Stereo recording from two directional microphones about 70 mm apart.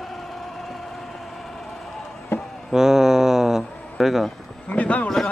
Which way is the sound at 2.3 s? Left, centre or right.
Left.